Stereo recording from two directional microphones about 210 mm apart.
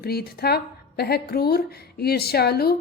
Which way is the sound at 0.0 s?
50° left (ahead or behind).